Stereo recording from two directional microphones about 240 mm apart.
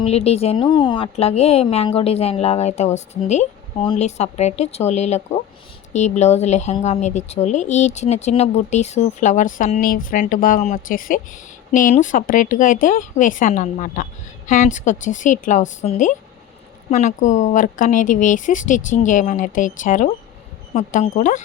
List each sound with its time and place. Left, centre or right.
0.0 s a woman's voice: left